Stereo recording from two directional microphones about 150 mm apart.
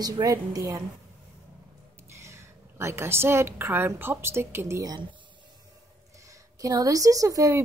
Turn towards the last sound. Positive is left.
turn(degrees=-20)  # may be behind; listen again after turning